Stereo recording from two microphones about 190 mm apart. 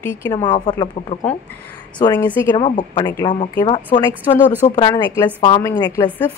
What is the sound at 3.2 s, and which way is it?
Speech, 25° left (ahead or behind).